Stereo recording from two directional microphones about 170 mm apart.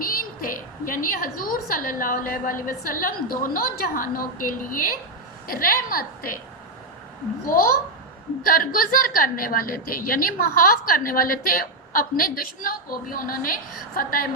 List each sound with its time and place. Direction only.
0.0 s a woman's voice: 55° left (ahead or behind)
7.4 s a woman's voice: 60° left (ahead or behind)